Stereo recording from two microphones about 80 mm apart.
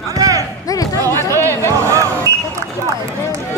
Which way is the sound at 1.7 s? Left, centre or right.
Right.